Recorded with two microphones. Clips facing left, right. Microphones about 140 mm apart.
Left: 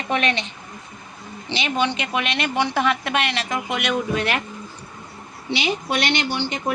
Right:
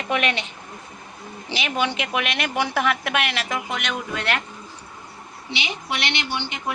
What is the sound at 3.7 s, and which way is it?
Speech, 5° left (ahead or behind).